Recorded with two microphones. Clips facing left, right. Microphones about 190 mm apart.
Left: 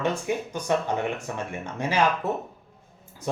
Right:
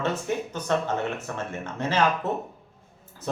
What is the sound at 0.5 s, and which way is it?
Speech, 10° left (ahead or behind).